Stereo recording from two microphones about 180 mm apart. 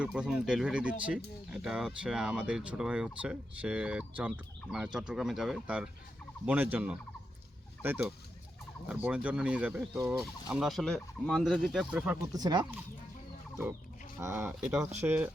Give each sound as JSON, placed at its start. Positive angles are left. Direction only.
{"t": 0.0, "sound": "speech", "side_deg": -5}
{"t": 12.3, "sound": "speech", "side_deg": -25}
{"t": 14.2, "sound": "speech", "side_deg": -15}